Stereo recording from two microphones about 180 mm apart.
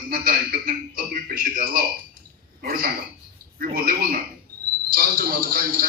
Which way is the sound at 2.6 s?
50° right (ahead or behind).